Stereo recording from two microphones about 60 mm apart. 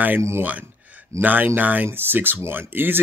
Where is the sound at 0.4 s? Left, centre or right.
Right.